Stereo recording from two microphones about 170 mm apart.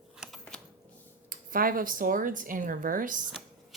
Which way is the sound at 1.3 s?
55° right (ahead or behind).